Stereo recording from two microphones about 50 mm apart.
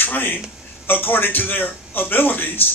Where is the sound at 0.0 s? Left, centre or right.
Left.